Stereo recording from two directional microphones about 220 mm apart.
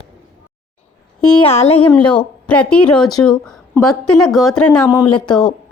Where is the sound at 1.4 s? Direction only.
25° left (ahead or behind).